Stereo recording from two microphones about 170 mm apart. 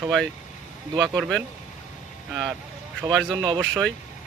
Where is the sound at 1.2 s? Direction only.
Centre (ahead or behind).